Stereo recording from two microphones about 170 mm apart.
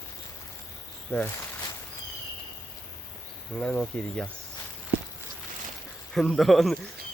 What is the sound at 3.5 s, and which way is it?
Speech, 5° left (ahead or behind).